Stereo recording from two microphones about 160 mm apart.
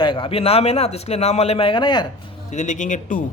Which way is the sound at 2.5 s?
50° left (ahead or behind).